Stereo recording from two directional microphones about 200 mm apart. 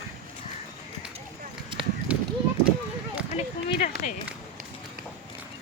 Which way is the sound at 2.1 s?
5° right (ahead or behind).